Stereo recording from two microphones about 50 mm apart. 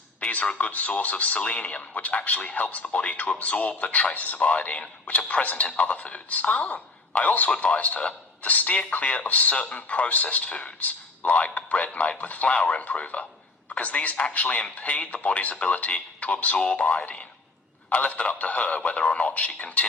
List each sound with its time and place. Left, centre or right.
0.2 s speech: left